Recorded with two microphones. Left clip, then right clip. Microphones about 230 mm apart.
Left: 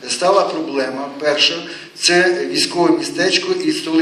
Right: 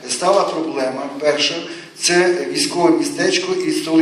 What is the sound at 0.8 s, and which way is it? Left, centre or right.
A man's voice, left.